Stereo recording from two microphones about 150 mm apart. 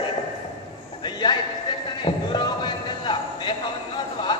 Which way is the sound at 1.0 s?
30° left (ahead or behind).